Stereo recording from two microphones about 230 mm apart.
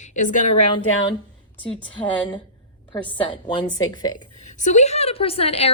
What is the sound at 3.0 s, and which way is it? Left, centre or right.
Speech, centre.